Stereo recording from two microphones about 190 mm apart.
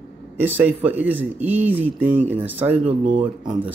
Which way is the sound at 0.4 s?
10° right (ahead or behind).